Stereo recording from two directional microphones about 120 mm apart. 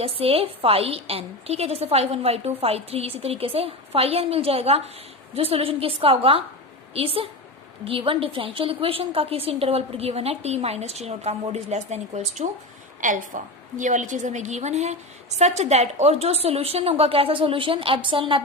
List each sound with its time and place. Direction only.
0.0 s a woman's voice: 50° right (ahead or behind); by 12.6 s 65° right (ahead or behind)
13.0 s a woman's voice: 90° right; by 18.4 s 45° right (ahead or behind)